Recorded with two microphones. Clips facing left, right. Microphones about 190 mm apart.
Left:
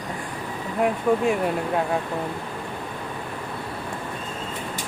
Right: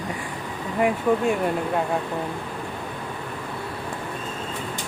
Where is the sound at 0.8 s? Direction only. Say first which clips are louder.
Even; centre (ahead or behind).